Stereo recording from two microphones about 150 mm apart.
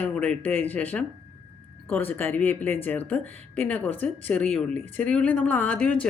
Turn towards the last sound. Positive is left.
turn(degrees=10)  # may be behind; listen again after turning